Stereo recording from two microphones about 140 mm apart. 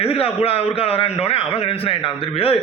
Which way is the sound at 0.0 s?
45° left (ahead or behind).